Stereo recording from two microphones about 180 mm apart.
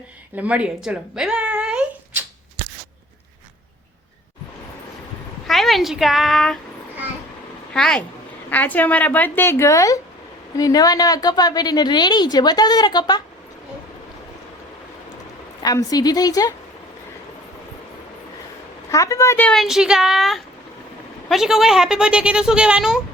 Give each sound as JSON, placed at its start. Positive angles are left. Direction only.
{"t": 0.3, "sound": "speech", "side_deg": -5}
{"t": 5.5, "sound": "a sound", "side_deg": 0}
{"t": 7.7, "sound": "a woman's voice", "side_deg": 5}
{"t": 15.6, "sound": "a woman's voice", "side_deg": 20}
{"t": 18.9, "sound": "a woman's voice", "side_deg": 20}